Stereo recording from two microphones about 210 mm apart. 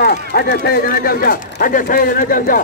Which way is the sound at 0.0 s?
45° left (ahead or behind).